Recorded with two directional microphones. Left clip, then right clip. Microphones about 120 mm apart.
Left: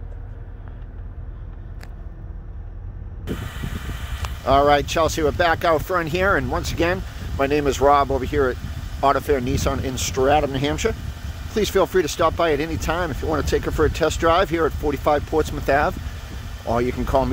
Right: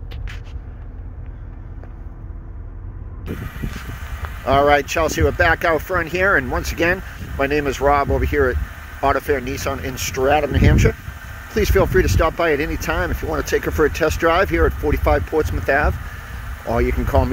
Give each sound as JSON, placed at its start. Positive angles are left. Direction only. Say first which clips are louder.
{"t": 3.3, "sound": "speech", "louder": "right 1 dB", "side_deg": 0}
{"t": 6.4, "sound": "speech", "louder": "right 3 dB", "side_deg": 0}
{"t": 7.2, "sound": "speech", "louder": "right 1 dB", "side_deg": 15}
{"t": 15.3, "sound": "speech", "louder": "right 1 dB", "side_deg": 15}
{"t": 16.6, "sound": "speech", "louder": "right 2 dB", "side_deg": 5}